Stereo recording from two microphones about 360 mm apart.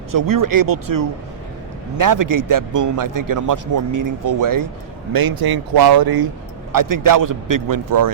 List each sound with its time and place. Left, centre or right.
0.1 s a man's voice: right
5.1 s speech: right
6.7 s a man's voice: right